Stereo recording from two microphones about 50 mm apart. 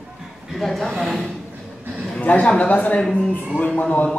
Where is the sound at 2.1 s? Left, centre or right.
Left.